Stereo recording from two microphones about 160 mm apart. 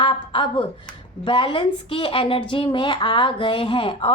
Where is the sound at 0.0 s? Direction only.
30° left (ahead or behind).